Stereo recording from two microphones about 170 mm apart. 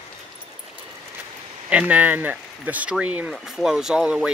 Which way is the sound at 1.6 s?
10° right (ahead or behind).